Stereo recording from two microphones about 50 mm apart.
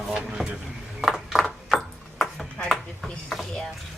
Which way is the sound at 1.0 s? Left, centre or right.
Centre.